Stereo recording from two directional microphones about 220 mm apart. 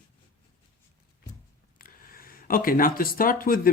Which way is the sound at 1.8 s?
40° left (ahead or behind).